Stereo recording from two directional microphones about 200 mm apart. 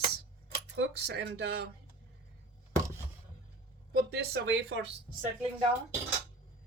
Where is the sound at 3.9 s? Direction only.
50° right (ahead or behind).